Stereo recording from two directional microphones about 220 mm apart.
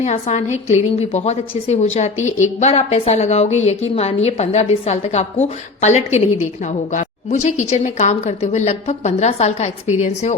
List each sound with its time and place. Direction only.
0.0 s a woman's voice: 30° left (ahead or behind)